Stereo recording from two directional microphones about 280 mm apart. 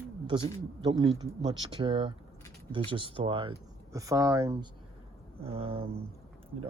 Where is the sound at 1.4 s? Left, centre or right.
Centre.